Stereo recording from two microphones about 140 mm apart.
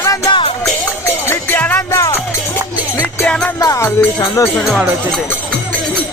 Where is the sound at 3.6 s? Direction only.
25° left (ahead or behind).